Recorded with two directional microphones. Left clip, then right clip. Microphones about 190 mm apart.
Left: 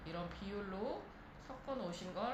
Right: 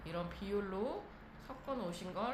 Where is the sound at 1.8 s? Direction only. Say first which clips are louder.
Right 1 dB; 25° right (ahead or behind).